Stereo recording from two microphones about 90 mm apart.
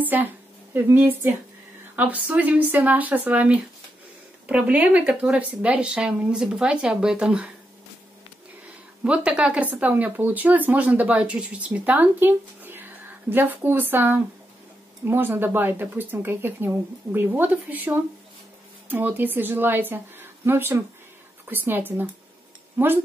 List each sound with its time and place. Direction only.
0.0 s speech: 20° right (ahead or behind)
9.0 s speech: 15° right (ahead or behind)